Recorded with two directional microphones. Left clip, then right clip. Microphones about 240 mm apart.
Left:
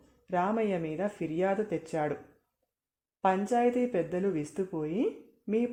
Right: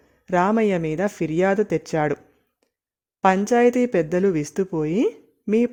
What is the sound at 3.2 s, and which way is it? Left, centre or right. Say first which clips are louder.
Speech: right 10 dB; right.